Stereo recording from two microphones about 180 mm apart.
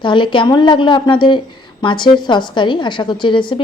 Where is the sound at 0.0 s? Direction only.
25° left (ahead or behind).